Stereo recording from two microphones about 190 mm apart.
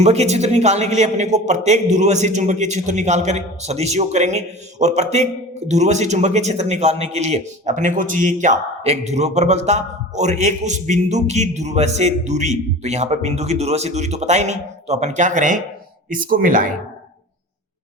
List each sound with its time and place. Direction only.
0.0 s a man's voice: 35° right (ahead or behind)